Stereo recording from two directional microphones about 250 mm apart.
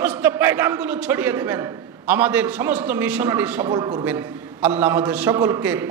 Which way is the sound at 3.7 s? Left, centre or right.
Centre.